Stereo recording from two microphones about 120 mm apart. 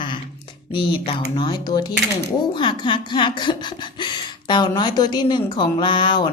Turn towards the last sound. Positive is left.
turn(degrees=45)  # may be behind; listen again after turning